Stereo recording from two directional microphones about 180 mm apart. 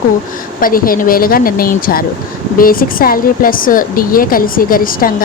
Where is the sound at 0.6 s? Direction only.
50° left (ahead or behind).